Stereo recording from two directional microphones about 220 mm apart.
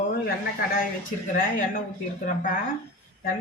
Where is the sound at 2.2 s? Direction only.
35° left (ahead or behind).